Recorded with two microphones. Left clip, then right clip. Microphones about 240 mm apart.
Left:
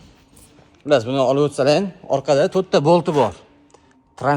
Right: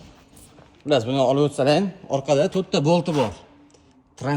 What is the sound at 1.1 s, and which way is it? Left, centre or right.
Speech, left.